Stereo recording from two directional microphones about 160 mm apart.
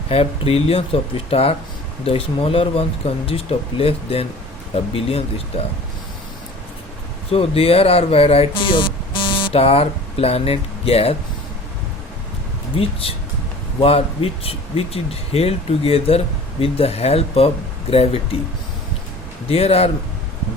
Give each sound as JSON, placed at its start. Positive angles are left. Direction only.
{"t": 0.1, "sound": "speech", "side_deg": 40}
{"t": 7.3, "sound": "speech", "side_deg": 35}
{"t": 12.8, "sound": "speech", "side_deg": 35}
{"t": 19.5, "sound": "speech", "side_deg": 40}